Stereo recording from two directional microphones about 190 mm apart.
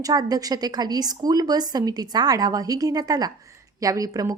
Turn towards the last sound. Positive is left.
turn(degrees=-20)  # may be behind; listen again after turning